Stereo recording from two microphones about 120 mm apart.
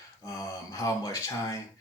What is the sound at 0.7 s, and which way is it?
Speech, 30° left (ahead or behind).